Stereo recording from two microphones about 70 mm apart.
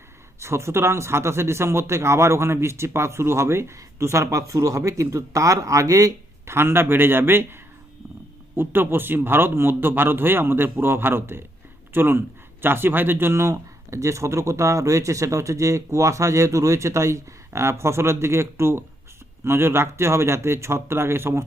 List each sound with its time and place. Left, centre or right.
0.3 s speech: right
6.4 s speech: right
8.5 s speech: right